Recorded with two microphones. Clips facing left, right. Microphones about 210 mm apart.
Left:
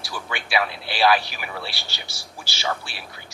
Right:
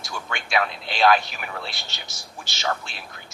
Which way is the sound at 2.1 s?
30° left (ahead or behind).